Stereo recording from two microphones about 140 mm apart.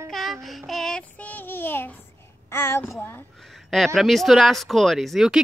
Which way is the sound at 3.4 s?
Centre (ahead or behind).